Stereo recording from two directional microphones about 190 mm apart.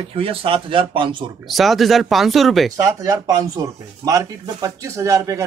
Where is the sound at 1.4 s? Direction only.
Centre (ahead or behind).